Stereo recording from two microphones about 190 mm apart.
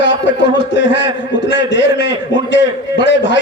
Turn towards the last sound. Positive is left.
turn(degrees=70)  # may be behind; listen again after turning